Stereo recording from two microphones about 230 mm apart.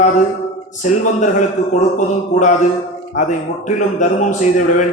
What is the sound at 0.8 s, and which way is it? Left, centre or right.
Speech, left.